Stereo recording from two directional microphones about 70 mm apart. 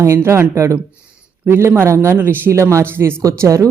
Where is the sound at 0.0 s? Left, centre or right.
Right.